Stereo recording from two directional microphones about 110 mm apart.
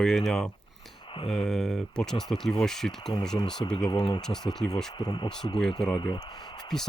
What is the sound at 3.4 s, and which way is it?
Speech, 45° left (ahead or behind).